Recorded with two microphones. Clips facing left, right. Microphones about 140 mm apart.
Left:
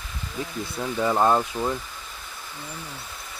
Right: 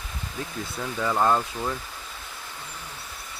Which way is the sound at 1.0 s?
15° left (ahead or behind).